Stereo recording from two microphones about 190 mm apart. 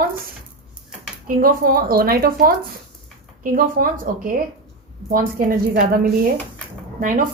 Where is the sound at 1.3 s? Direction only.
50° right (ahead or behind).